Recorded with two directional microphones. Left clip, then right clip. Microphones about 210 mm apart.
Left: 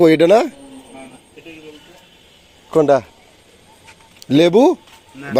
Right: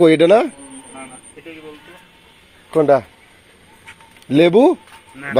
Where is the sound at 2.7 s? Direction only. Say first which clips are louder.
Even; 25° left (ahead or behind).